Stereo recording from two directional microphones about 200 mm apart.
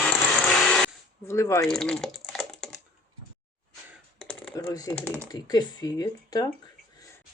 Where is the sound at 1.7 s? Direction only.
5° left (ahead or behind).